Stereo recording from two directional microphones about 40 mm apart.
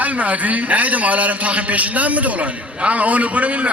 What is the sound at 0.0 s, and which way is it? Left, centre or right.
A man's voice, right.